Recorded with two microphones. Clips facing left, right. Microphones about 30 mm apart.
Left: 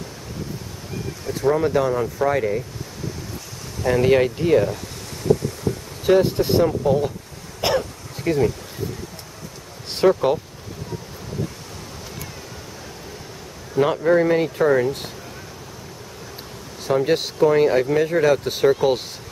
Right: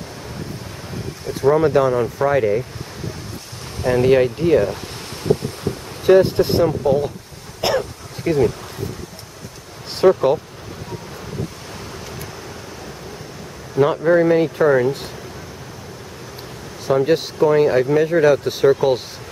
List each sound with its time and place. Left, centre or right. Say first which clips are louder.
1.2 s speech: right 4 dB; centre
4.0 s speech: right 3 dB; centre
6.3 s speech: right 2 dB; right
7.6 s bee: right 1 dB; centre
9.9 s speech: right 3 dB; centre
13.7 s speech: right 2 dB; centre
16.8 s speech: right 3 dB; centre